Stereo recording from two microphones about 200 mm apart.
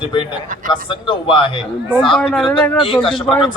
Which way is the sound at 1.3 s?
25° left (ahead or behind).